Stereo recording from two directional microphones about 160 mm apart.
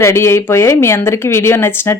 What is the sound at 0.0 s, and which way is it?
A woman's voice, 15° left (ahead or behind).